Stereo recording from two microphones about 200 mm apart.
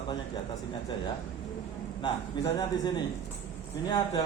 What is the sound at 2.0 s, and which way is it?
A man's voice, 20° left (ahead or behind).